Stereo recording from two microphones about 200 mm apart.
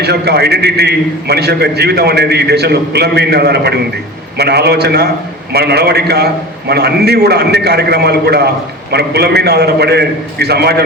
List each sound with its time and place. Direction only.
0.0 s a man's voice: 55° right (ahead or behind)